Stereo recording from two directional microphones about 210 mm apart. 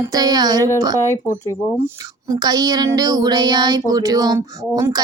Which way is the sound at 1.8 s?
15° right (ahead or behind).